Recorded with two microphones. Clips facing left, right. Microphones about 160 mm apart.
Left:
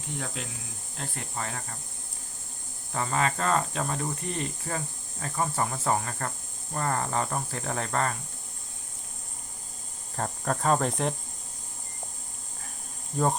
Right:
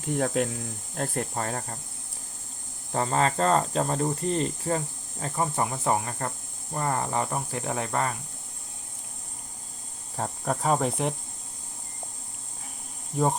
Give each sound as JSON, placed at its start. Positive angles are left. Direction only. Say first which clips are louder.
{"t": 0.1, "sound": "speech", "louder": "right 11 dB", "side_deg": -55}
{"t": 2.9, "sound": "speech", "louder": "right 3 dB", "side_deg": -35}
{"t": 10.2, "sound": "speech", "louder": "right 1 dB", "side_deg": -10}